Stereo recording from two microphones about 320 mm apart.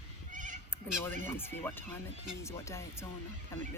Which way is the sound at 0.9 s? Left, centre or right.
Centre.